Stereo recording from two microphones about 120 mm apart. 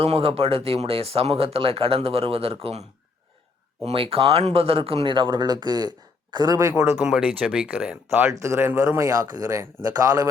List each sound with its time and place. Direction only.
0.0 s speech: 55° right (ahead or behind)
3.8 s speech: 50° right (ahead or behind); by 6.9 s 25° right (ahead or behind)
6.9 s speech: 10° right (ahead or behind)
8.2 s speech: 25° right (ahead or behind)